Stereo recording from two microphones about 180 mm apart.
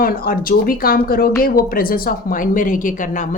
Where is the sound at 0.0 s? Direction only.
55° left (ahead or behind).